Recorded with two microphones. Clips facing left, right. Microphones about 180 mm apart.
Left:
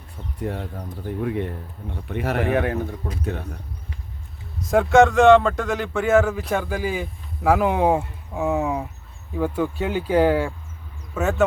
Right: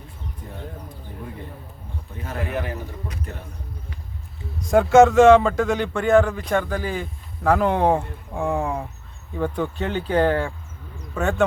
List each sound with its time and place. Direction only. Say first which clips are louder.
1.0 s speech: left 13 dB; 75° left (ahead or behind)
4.6 s speech: right 2 dB; centre (ahead or behind)